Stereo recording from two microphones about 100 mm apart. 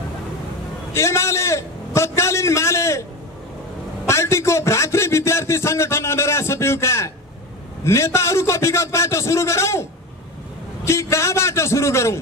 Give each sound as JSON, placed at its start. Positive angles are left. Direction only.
{"t": 0.9, "sound": "a man's voice", "side_deg": 25}
{"t": 4.1, "sound": "a man's voice", "side_deg": 25}
{"t": 10.9, "sound": "a man's voice", "side_deg": 25}